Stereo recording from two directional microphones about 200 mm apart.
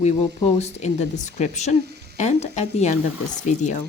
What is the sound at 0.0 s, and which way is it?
Speech, 35° left (ahead or behind).